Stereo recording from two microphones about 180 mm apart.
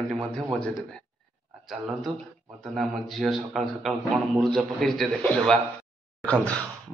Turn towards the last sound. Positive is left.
turn(degrees=5)  # may be behind; listen again after turning